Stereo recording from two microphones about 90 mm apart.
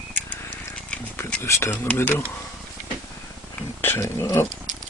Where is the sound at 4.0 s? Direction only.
35° left (ahead or behind).